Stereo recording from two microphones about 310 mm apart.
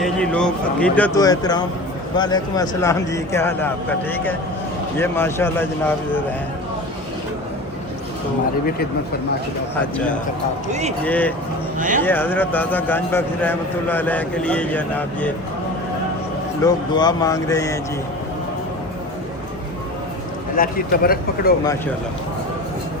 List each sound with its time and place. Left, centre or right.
0.0 s a man's voice: centre
10.7 s a man's voice: right
11.0 s a man's voice: centre
11.8 s a man's voice: right
12.0 s a man's voice: centre
16.6 s speech: centre
20.6 s speech: left